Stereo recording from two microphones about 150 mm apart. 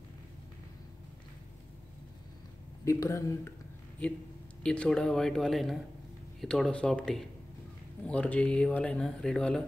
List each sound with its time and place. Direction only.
2.8 s speech: 20° left (ahead or behind)
4.6 s speech: 5° left (ahead or behind)